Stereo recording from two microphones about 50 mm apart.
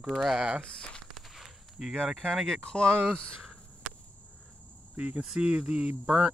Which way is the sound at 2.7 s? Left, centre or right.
Centre.